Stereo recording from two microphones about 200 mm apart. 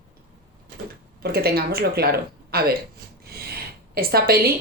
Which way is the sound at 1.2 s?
50° right (ahead or behind).